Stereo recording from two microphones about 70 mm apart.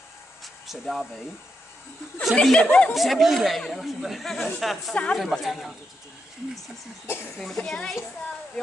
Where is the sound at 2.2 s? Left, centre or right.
Centre.